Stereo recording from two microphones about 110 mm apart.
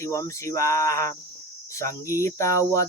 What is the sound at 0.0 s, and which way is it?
Cricket, 30° left (ahead or behind).